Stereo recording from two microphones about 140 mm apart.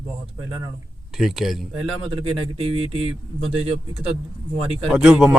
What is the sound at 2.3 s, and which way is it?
Speech, 40° right (ahead or behind).